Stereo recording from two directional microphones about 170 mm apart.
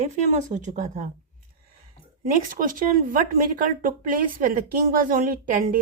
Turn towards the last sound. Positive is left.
turn(degrees=-55)  # may be behind; listen again after turning